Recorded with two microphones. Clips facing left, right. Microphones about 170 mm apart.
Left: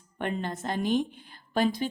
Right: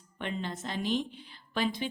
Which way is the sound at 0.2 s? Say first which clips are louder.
Left 4 dB; 50° left (ahead or behind).